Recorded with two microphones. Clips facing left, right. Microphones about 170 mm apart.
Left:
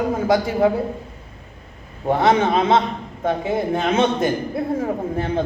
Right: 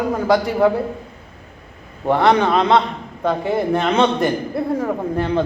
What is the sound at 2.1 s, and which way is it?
A man's voice, 60° right (ahead or behind).